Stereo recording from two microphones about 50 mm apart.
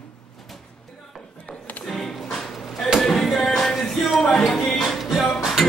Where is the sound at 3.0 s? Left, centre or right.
Centre.